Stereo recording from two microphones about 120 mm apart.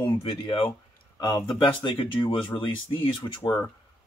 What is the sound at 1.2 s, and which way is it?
Speech, 35° left (ahead or behind).